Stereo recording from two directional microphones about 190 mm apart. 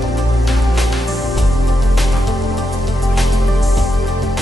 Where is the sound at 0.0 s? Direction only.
Centre (ahead or behind).